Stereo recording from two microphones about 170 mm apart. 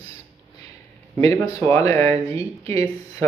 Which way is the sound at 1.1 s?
20° left (ahead or behind).